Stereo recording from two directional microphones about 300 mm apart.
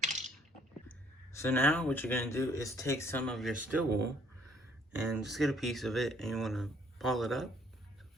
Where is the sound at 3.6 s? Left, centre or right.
Right.